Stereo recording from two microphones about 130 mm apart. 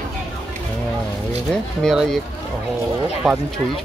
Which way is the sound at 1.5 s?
5° left (ahead or behind).